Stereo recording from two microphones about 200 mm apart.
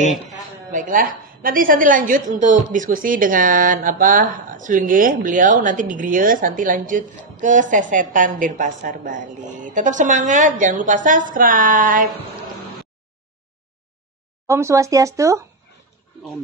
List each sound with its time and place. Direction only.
0.3 s a woman's voice: 40° right (ahead or behind)
11.3 s a sound: 45° right (ahead or behind)
14.5 s speech: 15° right (ahead or behind)